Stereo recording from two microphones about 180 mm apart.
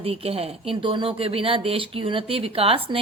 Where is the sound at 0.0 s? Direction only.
35° right (ahead or behind).